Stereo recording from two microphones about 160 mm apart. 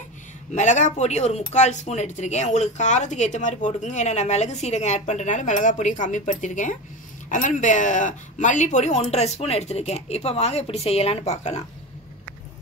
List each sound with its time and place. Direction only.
0.6 s speech: 50° left (ahead or behind)